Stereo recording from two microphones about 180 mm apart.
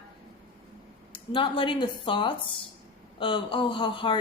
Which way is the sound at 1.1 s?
30° left (ahead or behind).